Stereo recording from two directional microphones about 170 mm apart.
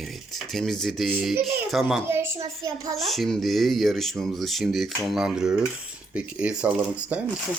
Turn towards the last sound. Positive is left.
turn(degrees=-5)  # may be behind; listen again after turning